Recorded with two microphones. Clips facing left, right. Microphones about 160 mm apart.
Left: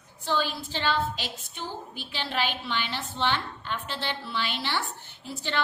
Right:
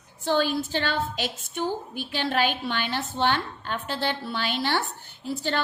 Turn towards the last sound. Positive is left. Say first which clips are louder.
# right 3 dB
turn(degrees=-40)  # may be behind; listen again after turning